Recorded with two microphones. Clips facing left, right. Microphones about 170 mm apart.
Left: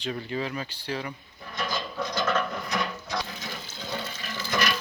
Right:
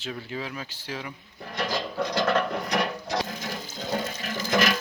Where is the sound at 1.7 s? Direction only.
65° right (ahead or behind).